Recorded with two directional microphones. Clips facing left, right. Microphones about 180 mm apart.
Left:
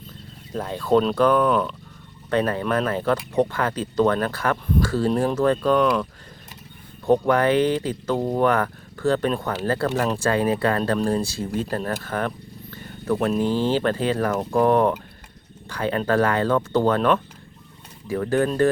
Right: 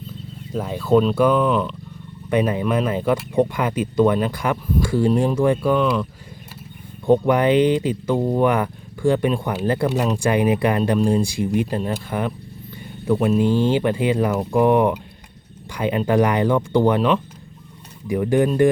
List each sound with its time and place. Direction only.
0.5 s speech: 5° right (ahead or behind)
2.3 s speech: 15° right (ahead or behind)
7.1 s speech: 15° right (ahead or behind)
12.7 s a sound: 10° right (ahead or behind)
13.4 s speech: 15° right (ahead or behind)